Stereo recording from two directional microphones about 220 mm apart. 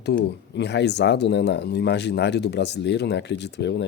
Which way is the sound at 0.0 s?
50° left (ahead or behind).